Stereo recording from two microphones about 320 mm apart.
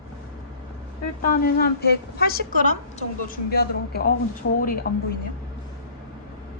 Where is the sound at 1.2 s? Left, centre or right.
Left.